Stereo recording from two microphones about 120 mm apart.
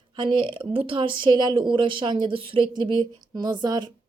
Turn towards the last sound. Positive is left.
turn(degrees=-35)  # may be behind; listen again after turning